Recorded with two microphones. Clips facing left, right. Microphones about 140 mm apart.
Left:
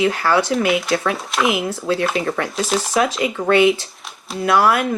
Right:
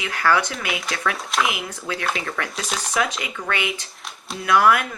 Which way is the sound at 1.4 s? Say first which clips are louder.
Left 8 dB; 30° left (ahead or behind).